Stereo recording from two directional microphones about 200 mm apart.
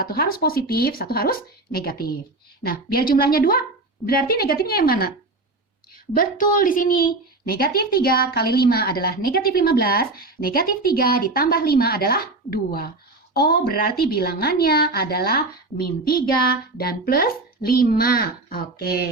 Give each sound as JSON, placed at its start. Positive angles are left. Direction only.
{"t": 0.0, "sound": "a woman's voice", "side_deg": 50}
{"t": 6.1, "sound": "a woman's voice", "side_deg": 45}